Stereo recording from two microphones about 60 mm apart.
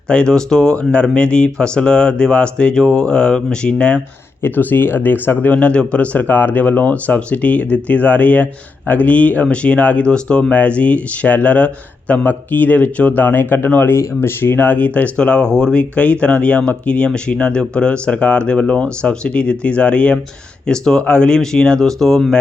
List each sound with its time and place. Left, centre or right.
0.1 s speech: centre
4.4 s speech: left; by 22.4 s centre